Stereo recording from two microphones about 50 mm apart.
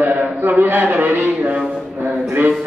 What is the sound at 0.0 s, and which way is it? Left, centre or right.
Speech, right.